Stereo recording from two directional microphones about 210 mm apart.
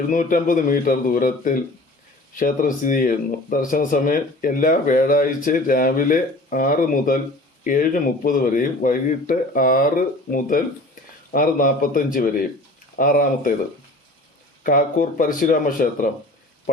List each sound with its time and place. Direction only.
0.1 s speech: 40° left (ahead or behind)
11.3 s speech: 40° left (ahead or behind)
14.6 s speech: 40° left (ahead or behind)